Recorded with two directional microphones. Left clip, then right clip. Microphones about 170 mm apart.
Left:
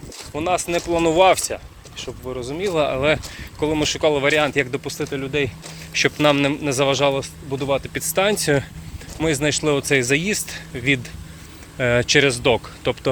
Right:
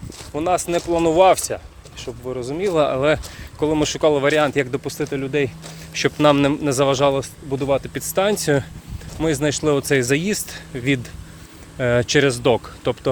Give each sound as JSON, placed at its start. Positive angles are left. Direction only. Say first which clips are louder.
{"t": 0.3, "sound": "speech", "louder": "right 1 dB", "side_deg": -45}
{"t": 0.9, "sound": "speech", "louder": "right 1 dB", "side_deg": -25}
{"t": 5.1, "sound": "speech", "louder": "right 1 dB", "side_deg": -50}
{"t": 5.9, "sound": "speech", "louder": "right 1 dB", "side_deg": -30}
{"t": 7.9, "sound": "speech", "louder": "even", "side_deg": -25}
{"t": 11.8, "sound": "speech", "louder": "left 1 dB", "side_deg": -25}